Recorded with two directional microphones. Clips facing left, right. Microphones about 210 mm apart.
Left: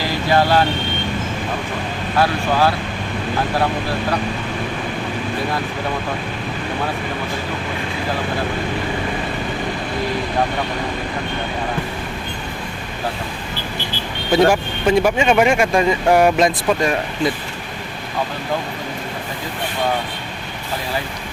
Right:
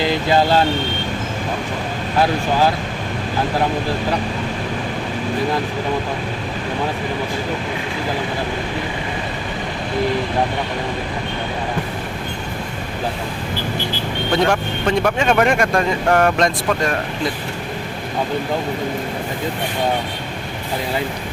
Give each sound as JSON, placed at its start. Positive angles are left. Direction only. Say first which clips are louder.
{"t": 0.3, "sound": "vehicle", "louder": "left 1 dB", "side_deg": -20}
{"t": 2.1, "sound": "speech", "louder": "even", "side_deg": -15}
{"t": 14.4, "sound": "speech", "louder": "left 3 dB", "side_deg": 5}